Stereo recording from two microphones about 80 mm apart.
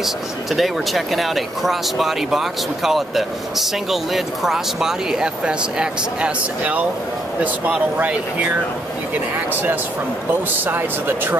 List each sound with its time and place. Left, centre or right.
0.0 s speech: centre
9.5 s speech: right